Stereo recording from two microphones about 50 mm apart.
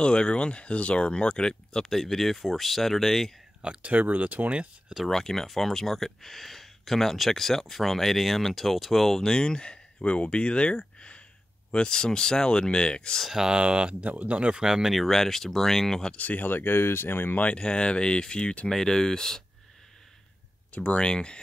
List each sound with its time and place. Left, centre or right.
0.0 s speech: centre
3.6 s speech: right
5.0 s speech: centre
13.3 s speech: centre
14.6 s speech: centre
15.0 s speech: centre
16.2 s speech: left
17.4 s speech: left
18.7 s speech: centre
20.7 s speech: left